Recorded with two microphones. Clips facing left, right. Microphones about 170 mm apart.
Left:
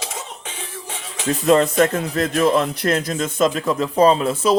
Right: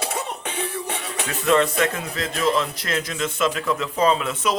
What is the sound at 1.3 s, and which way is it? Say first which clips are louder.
Speech: left 4 dB; 40° left (ahead or behind).